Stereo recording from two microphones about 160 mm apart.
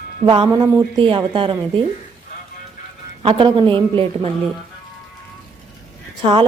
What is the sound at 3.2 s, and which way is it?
A woman's voice, 35° right (ahead or behind).